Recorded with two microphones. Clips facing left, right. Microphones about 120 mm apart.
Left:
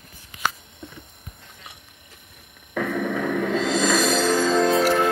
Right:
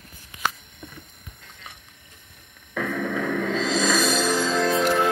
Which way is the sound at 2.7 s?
5° left (ahead or behind).